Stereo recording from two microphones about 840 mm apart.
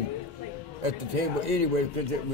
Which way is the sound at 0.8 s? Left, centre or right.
Right.